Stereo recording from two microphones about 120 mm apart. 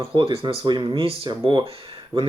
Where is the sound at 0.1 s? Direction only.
45° right (ahead or behind).